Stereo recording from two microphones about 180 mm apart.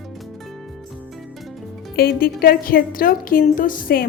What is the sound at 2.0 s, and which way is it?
A woman's voice, 55° left (ahead or behind).